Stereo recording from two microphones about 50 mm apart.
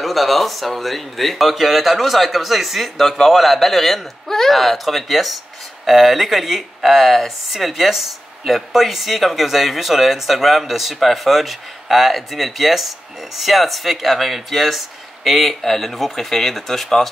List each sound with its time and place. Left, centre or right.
0.0 s speech: centre